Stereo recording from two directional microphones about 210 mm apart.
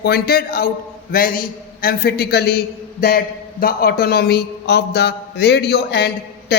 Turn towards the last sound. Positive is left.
turn(degrees=50)  # may be behind; listen again after turning